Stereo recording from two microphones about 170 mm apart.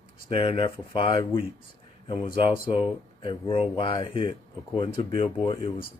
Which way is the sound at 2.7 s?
30° left (ahead or behind).